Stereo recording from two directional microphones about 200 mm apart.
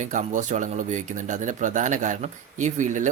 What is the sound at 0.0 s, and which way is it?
Speech, 40° right (ahead or behind).